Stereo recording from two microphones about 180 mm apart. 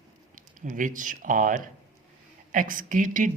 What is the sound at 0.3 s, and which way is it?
A woman's voice, 45° right (ahead or behind).